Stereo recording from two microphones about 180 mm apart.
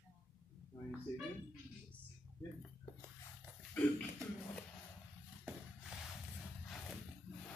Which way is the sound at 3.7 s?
5° left (ahead or behind).